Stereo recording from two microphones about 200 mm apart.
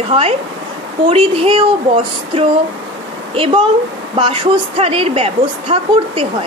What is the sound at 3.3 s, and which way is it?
A woman's voice, 25° right (ahead or behind).